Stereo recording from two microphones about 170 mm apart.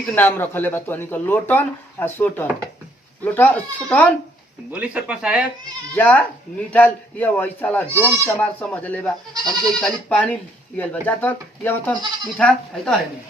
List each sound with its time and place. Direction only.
0.0 s speech: 10° left (ahead or behind)
4.7 s speech: 10° right (ahead or behind)
5.9 s speech: 10° left (ahead or behind)
7.9 s speech: 15° right (ahead or behind)
8.4 s speech: 10° left (ahead or behind)